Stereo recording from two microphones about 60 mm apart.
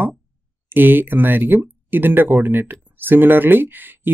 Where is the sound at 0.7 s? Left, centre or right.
Right.